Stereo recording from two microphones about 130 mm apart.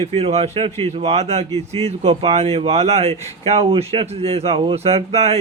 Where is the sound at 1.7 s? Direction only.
55° right (ahead or behind).